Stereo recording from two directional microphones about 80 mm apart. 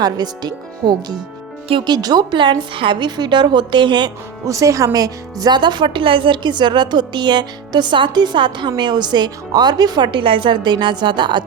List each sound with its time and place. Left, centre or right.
0.0 s speech: right
4.4 s speech: right